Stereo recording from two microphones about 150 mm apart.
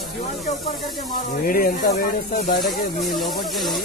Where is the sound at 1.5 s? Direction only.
70° left (ahead or behind).